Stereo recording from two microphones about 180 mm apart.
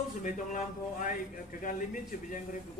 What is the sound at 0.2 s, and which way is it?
A man's voice, 45° left (ahead or behind).